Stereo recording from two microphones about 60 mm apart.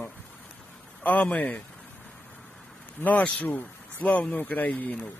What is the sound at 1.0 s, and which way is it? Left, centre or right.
Speech, left.